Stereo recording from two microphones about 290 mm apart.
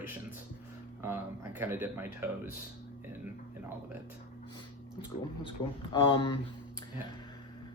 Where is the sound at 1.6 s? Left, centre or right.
Centre.